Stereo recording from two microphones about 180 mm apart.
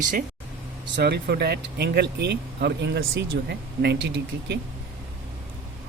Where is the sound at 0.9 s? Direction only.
70° right (ahead or behind).